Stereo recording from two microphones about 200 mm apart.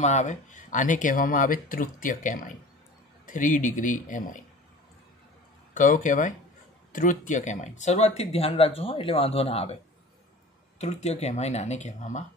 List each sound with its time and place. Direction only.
0.0 s speech: 35° left (ahead or behind)
5.8 s speech: 40° left (ahead or behind)
10.8 s speech: 35° left (ahead or behind)